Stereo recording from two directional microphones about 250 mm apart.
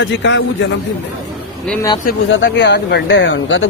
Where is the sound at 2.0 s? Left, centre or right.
Left.